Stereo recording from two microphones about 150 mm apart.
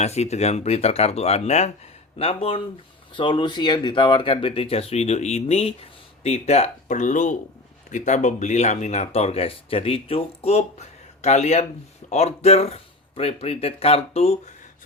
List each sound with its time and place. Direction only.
0.0 s speech: 45° left (ahead or behind)